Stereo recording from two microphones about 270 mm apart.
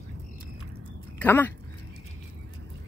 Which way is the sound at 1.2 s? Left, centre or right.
Centre.